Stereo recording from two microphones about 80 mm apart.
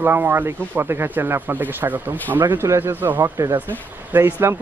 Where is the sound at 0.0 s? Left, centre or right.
Right.